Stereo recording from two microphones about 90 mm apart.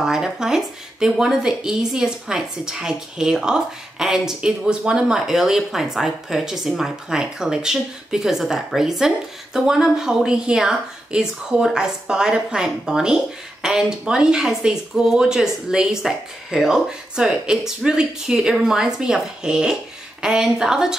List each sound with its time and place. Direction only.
0.0 s speech: 5° right (ahead or behind)